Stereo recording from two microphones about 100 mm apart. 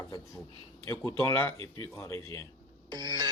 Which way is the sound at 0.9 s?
30° left (ahead or behind).